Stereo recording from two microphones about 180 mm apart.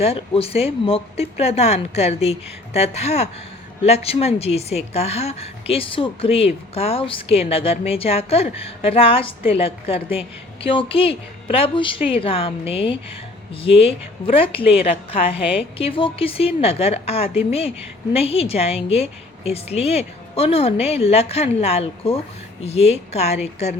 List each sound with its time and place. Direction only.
0.0 s a woman's voice: 35° left (ahead or behind)